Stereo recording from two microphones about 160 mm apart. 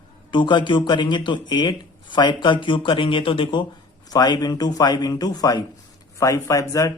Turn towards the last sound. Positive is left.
turn(degrees=20)  # may be behind; listen again after turning